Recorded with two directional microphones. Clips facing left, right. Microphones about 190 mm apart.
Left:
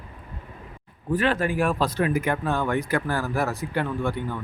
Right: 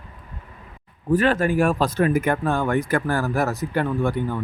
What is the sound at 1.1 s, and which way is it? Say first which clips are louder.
Speech: right 4 dB; 45° right (ahead or behind).